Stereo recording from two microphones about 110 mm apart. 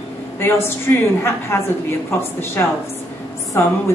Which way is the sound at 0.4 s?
20° left (ahead or behind).